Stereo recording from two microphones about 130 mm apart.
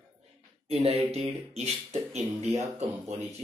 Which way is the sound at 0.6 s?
50° right (ahead or behind).